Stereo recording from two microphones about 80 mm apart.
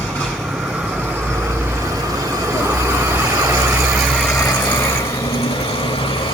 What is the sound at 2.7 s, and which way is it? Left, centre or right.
Vehicle, right.